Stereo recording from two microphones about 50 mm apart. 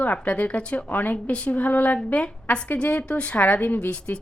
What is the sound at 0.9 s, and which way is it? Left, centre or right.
A woman's voice, left.